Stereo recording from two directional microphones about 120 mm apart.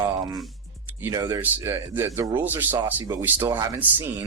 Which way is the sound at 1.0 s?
30° right (ahead or behind).